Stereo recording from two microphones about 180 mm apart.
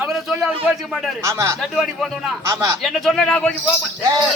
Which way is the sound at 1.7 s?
Centre (ahead or behind).